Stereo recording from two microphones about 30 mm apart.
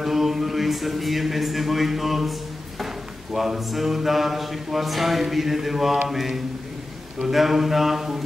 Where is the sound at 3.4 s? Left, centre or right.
Centre.